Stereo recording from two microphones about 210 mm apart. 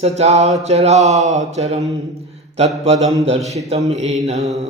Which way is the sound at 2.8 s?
30° right (ahead or behind).